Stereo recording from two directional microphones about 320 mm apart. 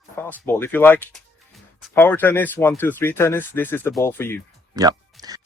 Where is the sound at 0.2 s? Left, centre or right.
Centre.